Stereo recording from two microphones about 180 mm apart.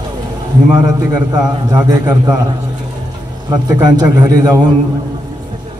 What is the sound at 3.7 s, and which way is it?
Speech, 20° right (ahead or behind).